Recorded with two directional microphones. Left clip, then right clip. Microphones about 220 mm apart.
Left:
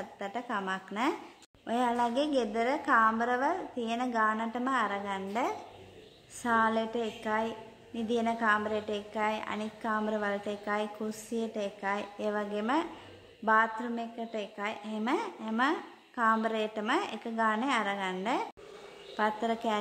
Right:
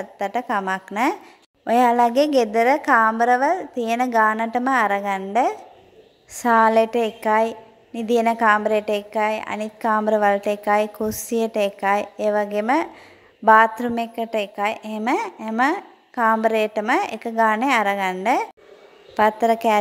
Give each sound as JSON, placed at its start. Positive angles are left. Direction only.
{"t": 0.2, "sound": "a woman's voice", "side_deg": -35}